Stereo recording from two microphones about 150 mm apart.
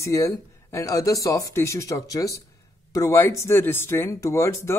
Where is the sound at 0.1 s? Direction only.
20° left (ahead or behind).